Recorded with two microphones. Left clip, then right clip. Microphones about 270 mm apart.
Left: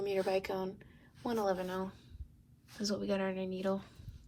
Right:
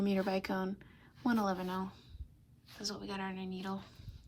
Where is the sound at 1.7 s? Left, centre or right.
Centre.